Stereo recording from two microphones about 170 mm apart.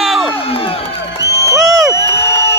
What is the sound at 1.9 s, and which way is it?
Crowd, 15° left (ahead or behind).